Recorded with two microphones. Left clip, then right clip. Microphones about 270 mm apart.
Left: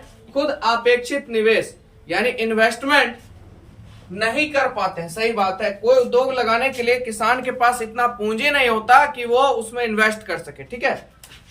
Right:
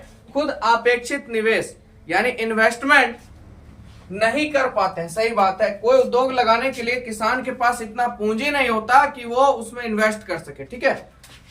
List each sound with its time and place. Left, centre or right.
0.3 s speech: centre
4.2 s speech: centre